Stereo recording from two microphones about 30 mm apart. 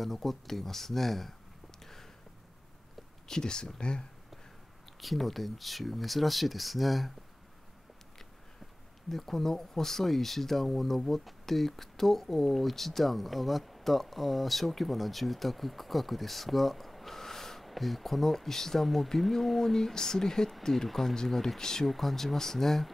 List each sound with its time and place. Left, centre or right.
0.0 s speech: centre
1.8 s a sound: centre
3.3 s speech: left
5.0 s speech: centre
9.1 s speech: centre
17.6 s speech: centre
19.7 s speech: centre
21.8 s speech: centre